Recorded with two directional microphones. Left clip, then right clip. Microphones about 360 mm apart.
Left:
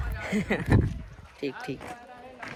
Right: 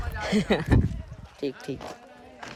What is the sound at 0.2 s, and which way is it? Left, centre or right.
Speech, right.